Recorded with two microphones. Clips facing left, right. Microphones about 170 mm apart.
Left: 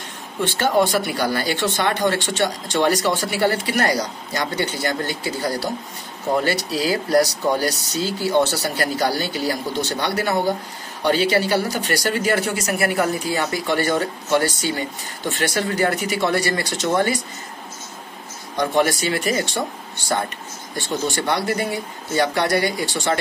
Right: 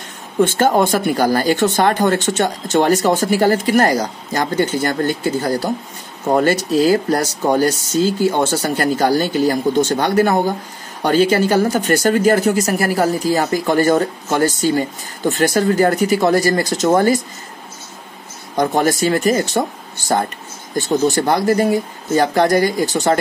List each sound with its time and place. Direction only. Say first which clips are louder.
0.4 s speech: right 5 dB; 45° right (ahead or behind)
18.6 s speech: right 4 dB; 40° right (ahead or behind)